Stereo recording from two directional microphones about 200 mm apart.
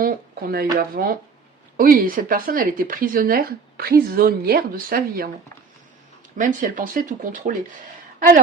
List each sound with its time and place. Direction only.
0.0 s speech: 45° right (ahead or behind)
6.3 s speech: 40° right (ahead or behind)